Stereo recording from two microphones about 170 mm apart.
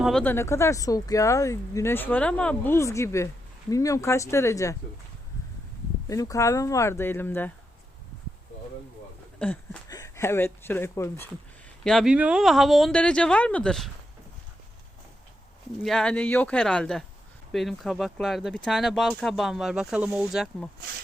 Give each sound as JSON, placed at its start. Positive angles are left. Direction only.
{"t": 0.0, "sound": "speech", "side_deg": 5}
{"t": 0.3, "sound": "speech", "side_deg": 15}
{"t": 6.1, "sound": "speech", "side_deg": 20}
{"t": 9.4, "sound": "speech", "side_deg": 5}
{"t": 11.8, "sound": "speech", "side_deg": 0}
{"t": 15.8, "sound": "speech", "side_deg": 0}